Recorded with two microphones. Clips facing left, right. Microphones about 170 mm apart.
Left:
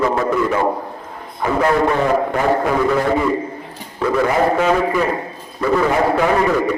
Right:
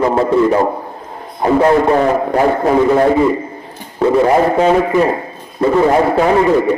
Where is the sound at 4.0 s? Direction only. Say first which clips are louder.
Right 5 dB; 25° right (ahead or behind).